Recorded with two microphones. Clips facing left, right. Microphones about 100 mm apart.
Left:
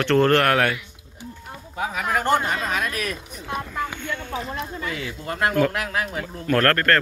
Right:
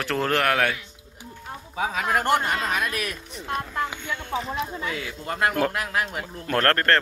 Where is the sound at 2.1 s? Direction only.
20° left (ahead or behind).